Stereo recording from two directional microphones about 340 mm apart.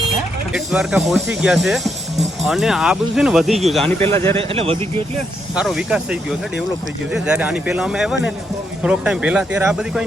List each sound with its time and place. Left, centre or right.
0.5 s speech: centre
4.4 s a man's voice: centre
5.5 s speech: centre